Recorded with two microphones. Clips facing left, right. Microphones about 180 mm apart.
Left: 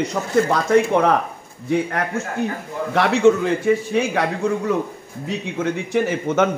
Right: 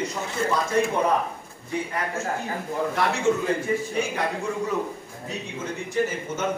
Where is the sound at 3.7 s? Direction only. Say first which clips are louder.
Left 11 dB; 85° left.